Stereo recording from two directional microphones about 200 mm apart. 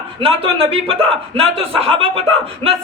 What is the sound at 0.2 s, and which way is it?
A man's voice, 30° right (ahead or behind).